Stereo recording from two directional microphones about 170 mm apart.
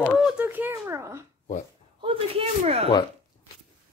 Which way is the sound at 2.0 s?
30° right (ahead or behind).